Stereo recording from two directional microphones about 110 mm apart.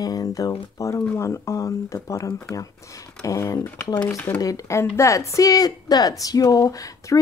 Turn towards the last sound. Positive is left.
turn(degrees=30)  # may be behind; listen again after turning